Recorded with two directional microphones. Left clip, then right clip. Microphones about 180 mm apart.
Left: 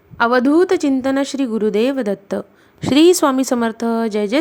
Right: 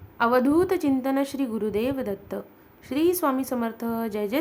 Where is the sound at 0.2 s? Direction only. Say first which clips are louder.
Left 7 dB; 30° left (ahead or behind).